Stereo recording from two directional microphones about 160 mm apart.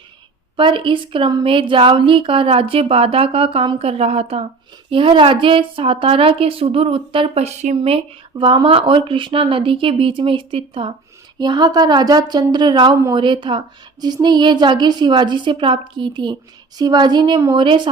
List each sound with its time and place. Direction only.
0.5 s a woman's voice: 30° right (ahead or behind)